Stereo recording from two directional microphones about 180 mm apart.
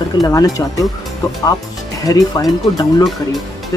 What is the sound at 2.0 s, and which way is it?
Speech, 20° left (ahead or behind).